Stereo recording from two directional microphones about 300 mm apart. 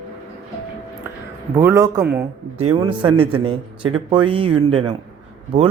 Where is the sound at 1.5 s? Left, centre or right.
Centre.